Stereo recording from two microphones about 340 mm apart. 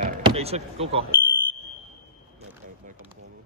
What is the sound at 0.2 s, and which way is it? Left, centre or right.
Speech, centre.